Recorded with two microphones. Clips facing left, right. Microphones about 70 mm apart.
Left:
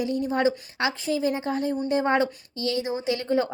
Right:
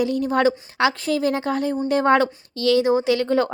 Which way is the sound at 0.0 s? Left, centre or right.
Right.